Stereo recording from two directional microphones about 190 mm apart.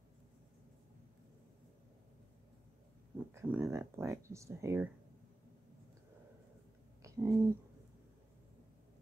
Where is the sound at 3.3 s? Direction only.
15° right (ahead or behind).